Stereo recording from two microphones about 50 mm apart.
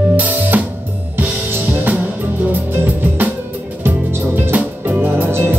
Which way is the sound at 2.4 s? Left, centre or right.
Right.